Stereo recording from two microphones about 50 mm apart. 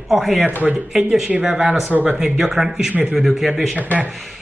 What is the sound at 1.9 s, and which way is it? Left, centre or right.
Speech, right.